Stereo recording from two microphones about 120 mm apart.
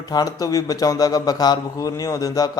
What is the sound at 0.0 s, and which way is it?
A man's voice, 35° left (ahead or behind).